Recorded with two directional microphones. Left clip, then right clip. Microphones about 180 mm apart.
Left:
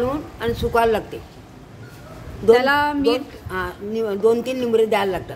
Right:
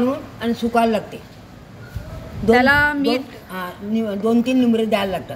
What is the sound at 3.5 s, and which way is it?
A woman's voice, 25° left (ahead or behind).